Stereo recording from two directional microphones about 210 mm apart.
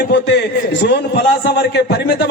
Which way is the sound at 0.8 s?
55° left (ahead or behind).